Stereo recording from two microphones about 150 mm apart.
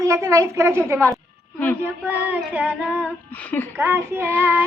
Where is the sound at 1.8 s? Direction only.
10° right (ahead or behind).